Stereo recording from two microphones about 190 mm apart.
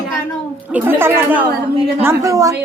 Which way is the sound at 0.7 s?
10° right (ahead or behind).